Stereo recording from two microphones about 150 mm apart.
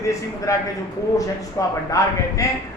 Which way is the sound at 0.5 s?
20° left (ahead or behind).